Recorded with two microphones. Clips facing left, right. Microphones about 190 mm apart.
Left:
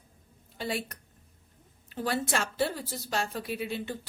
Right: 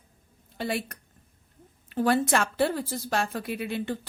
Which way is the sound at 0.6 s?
60° right (ahead or behind).